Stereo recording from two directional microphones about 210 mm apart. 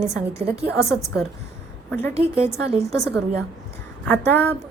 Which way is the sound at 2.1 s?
30° right (ahead or behind).